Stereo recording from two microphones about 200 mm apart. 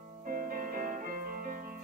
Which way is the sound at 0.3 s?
45° right (ahead or behind).